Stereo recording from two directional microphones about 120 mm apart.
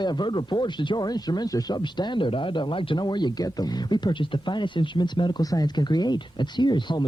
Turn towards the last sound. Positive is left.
turn(degrees=40)  # may be behind; listen again after turning